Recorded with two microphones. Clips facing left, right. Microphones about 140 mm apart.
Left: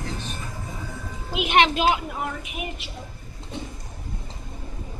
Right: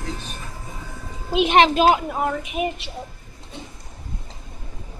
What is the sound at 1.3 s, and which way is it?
Speech, 35° right (ahead or behind).